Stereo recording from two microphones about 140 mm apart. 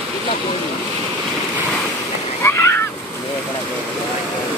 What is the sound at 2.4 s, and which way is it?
Splash, 20° left (ahead or behind).